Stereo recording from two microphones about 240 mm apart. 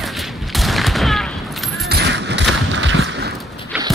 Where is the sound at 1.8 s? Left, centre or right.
Right.